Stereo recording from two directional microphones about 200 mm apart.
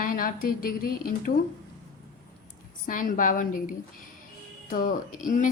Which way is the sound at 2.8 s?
40° left (ahead or behind).